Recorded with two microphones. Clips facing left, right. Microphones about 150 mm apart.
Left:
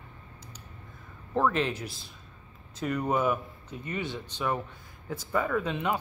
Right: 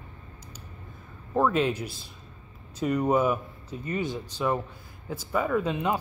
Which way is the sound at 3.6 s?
35° right (ahead or behind).